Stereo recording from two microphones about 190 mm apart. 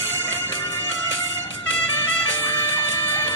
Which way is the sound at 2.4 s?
10° left (ahead or behind).